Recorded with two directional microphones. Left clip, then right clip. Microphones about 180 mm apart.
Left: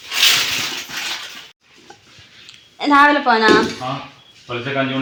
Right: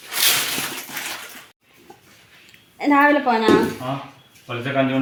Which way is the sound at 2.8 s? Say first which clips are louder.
Left 4 dB; centre (ahead or behind).